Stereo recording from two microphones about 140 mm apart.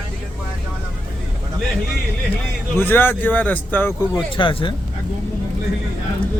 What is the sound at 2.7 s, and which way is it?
Speech, 15° left (ahead or behind).